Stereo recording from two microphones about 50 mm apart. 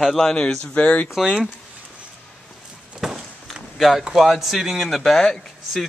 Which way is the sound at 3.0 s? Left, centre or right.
Centre.